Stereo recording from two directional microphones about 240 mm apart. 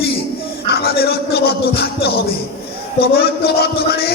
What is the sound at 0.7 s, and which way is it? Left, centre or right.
A man's voice, left.